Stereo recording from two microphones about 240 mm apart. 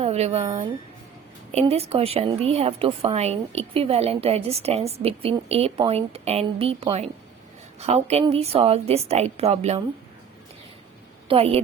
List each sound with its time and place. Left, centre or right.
0.0 s a woman's voice: right
11.3 s a woman's voice: right